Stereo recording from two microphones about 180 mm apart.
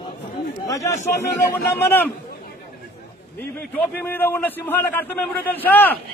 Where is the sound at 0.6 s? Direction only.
15° left (ahead or behind).